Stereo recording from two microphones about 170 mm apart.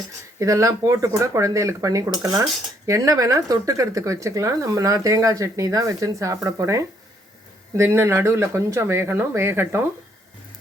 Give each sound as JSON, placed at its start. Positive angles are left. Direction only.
{"t": 0.3, "sound": "cutlery", "side_deg": -20}
{"t": 7.8, "sound": "speech", "side_deg": -15}